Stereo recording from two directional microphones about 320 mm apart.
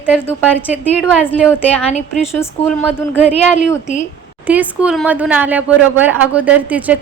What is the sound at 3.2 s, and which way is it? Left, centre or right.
Speech, left.